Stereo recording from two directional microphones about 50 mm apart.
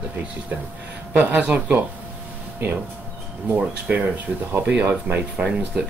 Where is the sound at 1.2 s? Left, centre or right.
Right.